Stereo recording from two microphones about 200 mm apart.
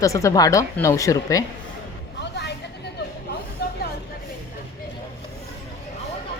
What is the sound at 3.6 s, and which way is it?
Vehicle, 55° left (ahead or behind).